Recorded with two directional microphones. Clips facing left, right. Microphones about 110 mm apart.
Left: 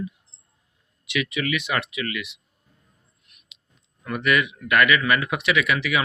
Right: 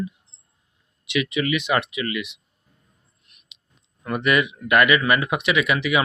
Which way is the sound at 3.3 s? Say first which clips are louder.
Right 1 dB; 30° right (ahead or behind).